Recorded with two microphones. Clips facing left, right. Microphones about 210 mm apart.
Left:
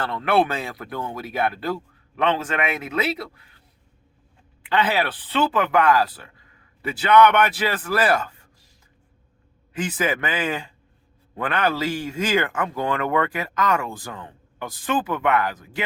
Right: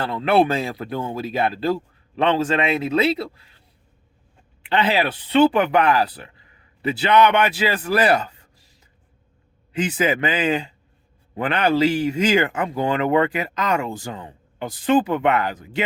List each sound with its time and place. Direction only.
0.0 s speech: 25° right (ahead or behind)
4.6 s speech: 20° right (ahead or behind)
9.7 s speech: 20° right (ahead or behind)